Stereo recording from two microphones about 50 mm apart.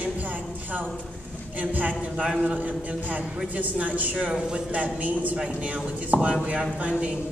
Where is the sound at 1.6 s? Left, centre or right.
Right.